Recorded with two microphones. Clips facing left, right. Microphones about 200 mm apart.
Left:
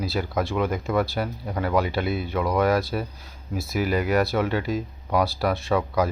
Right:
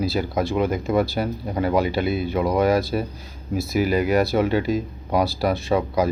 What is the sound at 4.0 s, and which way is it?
Speech, 20° right (ahead or behind).